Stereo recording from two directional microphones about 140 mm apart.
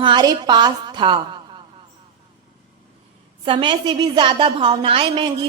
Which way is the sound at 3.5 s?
35° right (ahead or behind).